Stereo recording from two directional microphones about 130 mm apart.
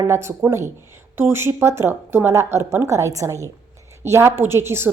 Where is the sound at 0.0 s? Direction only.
20° right (ahead or behind).